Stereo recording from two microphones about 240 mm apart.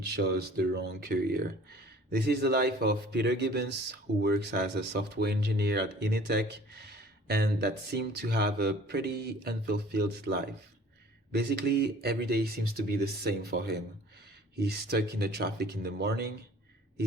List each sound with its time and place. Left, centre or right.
0.2 s speech: right